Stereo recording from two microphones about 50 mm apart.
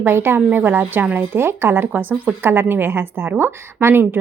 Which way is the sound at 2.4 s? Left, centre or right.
Right.